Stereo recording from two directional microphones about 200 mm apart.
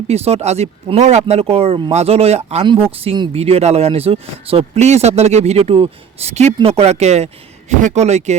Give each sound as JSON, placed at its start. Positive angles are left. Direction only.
{"t": 0.1, "sound": "speech", "side_deg": -30}